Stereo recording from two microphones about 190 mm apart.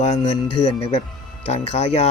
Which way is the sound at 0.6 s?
40° left (ahead or behind).